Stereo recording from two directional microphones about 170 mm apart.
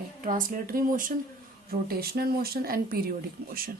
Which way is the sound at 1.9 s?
65° right (ahead or behind).